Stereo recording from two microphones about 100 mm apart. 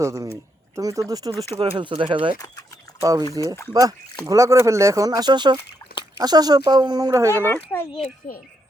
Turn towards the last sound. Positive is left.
turn(degrees=20)  # may be behind; listen again after turning